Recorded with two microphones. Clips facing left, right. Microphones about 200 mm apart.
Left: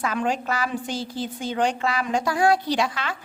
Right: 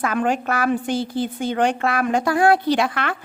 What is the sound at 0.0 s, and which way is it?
A woman's voice, 55° right (ahead or behind).